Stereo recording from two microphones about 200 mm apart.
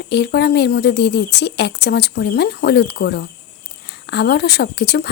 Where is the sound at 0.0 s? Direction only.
55° left (ahead or behind).